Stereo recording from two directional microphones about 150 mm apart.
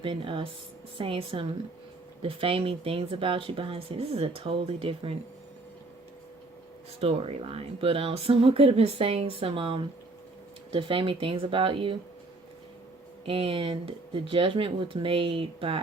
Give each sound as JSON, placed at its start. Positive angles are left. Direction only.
{"t": 0.0, "sound": "speech", "side_deg": -35}
{"t": 7.0, "sound": "speech", "side_deg": -40}
{"t": 13.2, "sound": "speech", "side_deg": -35}